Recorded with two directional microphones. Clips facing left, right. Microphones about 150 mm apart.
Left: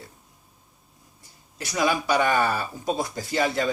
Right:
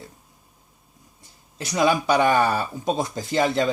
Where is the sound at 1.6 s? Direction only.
20° right (ahead or behind).